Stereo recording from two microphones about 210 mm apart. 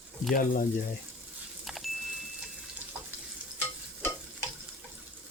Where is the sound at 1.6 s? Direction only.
Centre (ahead or behind).